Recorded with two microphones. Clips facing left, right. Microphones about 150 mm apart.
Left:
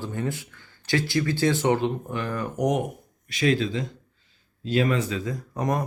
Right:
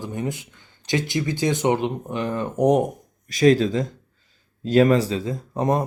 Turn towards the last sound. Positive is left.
turn(degrees=-25)  # may be behind; listen again after turning